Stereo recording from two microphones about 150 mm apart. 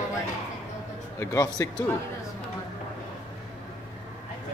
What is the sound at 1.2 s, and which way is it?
Speech, 20° left (ahead or behind).